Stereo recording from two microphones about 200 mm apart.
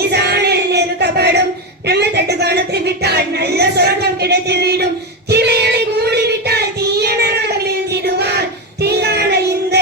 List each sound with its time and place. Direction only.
0.1 s music: 55° right (ahead or behind)
1.9 s a sound: 55° right (ahead or behind)
5.3 s child singing: 55° right (ahead or behind)